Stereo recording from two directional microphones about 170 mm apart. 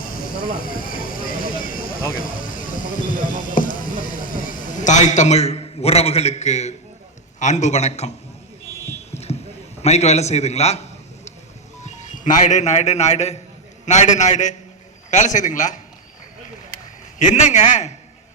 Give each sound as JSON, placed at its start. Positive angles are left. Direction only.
{"t": 0.0, "sound": "a sound", "side_deg": 55}
{"t": 7.3, "sound": "a man's voice", "side_deg": 45}
{"t": 9.1, "sound": "rowboat", "side_deg": 40}
{"t": 9.8, "sound": "a man's voice", "side_deg": 40}
{"t": 11.8, "sound": "a man's voice", "side_deg": 45}
{"t": 17.2, "sound": "a man's voice", "side_deg": 45}